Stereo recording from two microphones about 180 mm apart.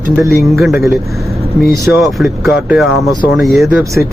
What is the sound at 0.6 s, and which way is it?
Speech, centre (ahead or behind).